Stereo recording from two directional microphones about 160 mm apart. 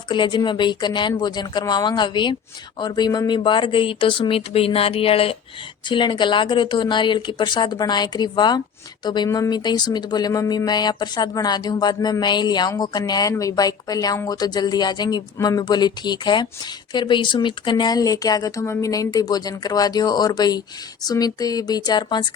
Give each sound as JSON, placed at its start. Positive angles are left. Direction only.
{"t": 0.1, "sound": "speech", "side_deg": 30}